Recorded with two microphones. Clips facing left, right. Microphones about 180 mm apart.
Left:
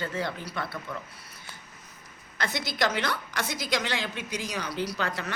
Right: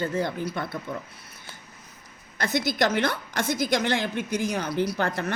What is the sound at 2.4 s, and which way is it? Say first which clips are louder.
A woman's voice: right 5 dB; 45° right (ahead or behind).